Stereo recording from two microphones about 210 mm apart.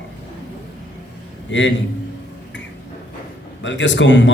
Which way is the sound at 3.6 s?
60° left (ahead or behind).